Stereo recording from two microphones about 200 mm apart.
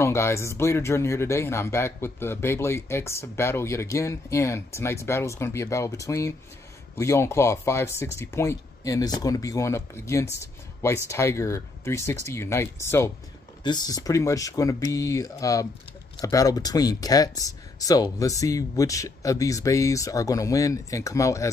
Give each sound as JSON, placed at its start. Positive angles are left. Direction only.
{"t": 0.0, "sound": "speech", "side_deg": 15}